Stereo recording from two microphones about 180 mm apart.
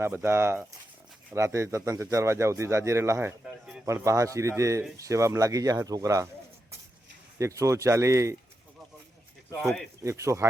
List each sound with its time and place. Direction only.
0.0 s speech: 10° right (ahead or behind)
3.4 s speech: 5° right (ahead or behind)
3.8 s speech: 15° right (ahead or behind)
7.3 s speech: 15° right (ahead or behind)
10.0 s speech: 15° right (ahead or behind)